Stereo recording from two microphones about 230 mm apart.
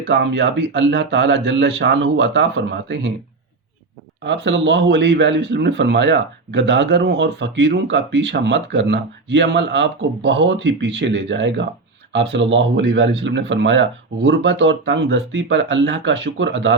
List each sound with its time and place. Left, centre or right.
0.1 s speech: right
4.2 s speech: right